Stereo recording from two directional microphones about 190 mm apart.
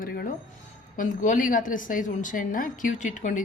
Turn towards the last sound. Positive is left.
turn(degrees=40)  # may be behind; listen again after turning